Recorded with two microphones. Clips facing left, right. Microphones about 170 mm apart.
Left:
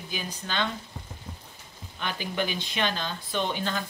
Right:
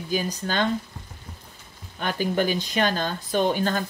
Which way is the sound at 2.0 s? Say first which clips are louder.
Right 6 dB; 45° right (ahead or behind).